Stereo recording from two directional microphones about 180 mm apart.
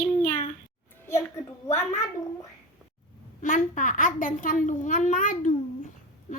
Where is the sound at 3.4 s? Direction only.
45° left (ahead or behind).